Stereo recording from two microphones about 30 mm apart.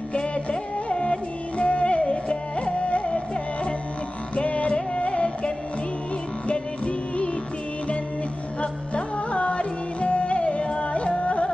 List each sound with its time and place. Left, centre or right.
0.1 s music: left
4.4 s music: left
8.5 s music: left